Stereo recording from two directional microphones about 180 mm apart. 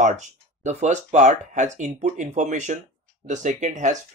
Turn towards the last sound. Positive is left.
turn(degrees=-45)  # may be behind; listen again after turning